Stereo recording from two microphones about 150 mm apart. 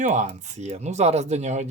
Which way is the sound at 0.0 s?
55° right (ahead or behind).